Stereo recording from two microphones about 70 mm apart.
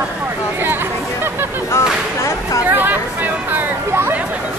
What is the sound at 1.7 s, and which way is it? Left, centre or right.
Speech, left.